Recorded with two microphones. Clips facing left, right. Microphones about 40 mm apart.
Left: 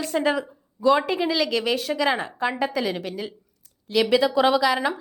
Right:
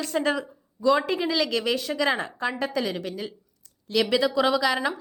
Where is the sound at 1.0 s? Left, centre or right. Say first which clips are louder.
Left 2 dB; centre.